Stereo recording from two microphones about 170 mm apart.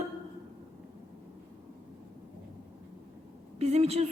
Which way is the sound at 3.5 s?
40° right (ahead or behind).